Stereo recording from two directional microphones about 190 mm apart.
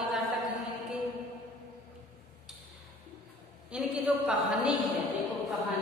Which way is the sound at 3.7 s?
5° right (ahead or behind).